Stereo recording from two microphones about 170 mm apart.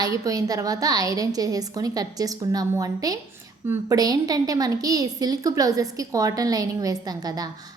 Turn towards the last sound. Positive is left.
turn(degrees=-20)  # may be behind; listen again after turning